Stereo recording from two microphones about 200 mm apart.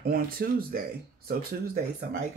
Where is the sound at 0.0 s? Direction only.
50° right (ahead or behind).